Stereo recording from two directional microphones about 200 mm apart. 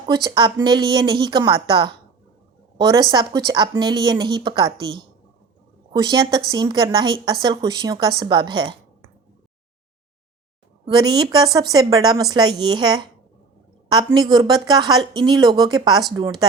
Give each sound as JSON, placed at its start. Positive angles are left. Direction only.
{"t": 0.1, "sound": "speech", "side_deg": -20}
{"t": 10.8, "sound": "speech", "side_deg": -20}